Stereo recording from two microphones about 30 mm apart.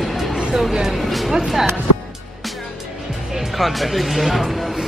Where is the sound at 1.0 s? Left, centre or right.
Centre.